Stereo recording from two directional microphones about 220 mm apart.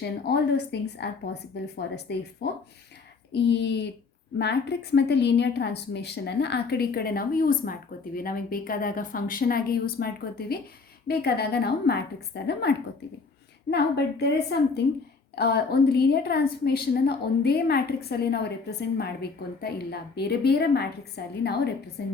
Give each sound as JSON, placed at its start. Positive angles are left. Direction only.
{"t": 0.0, "sound": "a woman's voice", "side_deg": 50}